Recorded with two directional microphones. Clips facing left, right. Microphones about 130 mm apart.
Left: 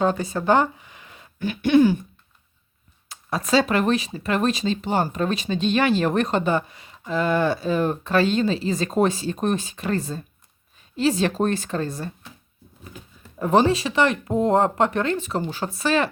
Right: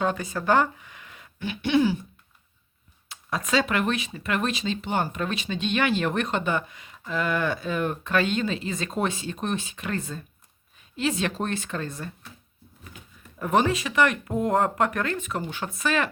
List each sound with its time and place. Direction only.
0.0 s speech: 35° left (ahead or behind)
1.4 s a sound: 45° left (ahead or behind)
3.1 s speech: 35° left (ahead or behind)
13.4 s speech: 30° left (ahead or behind)